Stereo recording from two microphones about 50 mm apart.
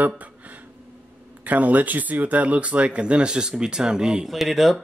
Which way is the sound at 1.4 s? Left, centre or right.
Right.